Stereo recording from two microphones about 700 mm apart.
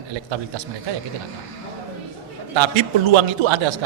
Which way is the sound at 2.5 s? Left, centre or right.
Right.